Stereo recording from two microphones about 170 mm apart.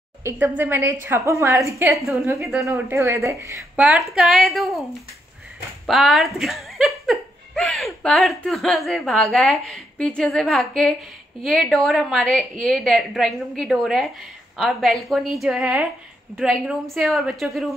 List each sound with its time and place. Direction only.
0.2 s speech: 10° right (ahead or behind)
3.8 s a woman's voice: 5° right (ahead or behind)
5.9 s a woman's voice: centre (ahead or behind)